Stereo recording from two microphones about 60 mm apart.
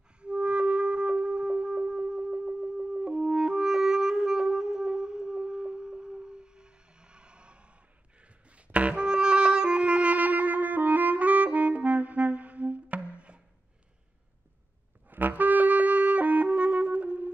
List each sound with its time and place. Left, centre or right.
0.2 s music: centre
15.0 s music: right